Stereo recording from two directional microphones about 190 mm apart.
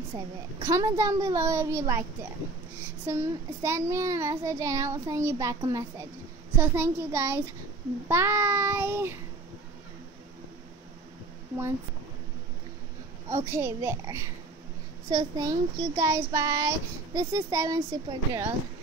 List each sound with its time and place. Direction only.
0.7 s a child's voice: 15° right (ahead or behind)
3.1 s a child's voice: 15° right (ahead or behind)
13.3 s a child's voice: 15° right (ahead or behind)